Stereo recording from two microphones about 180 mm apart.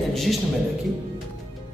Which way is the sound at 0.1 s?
Centre (ahead or behind).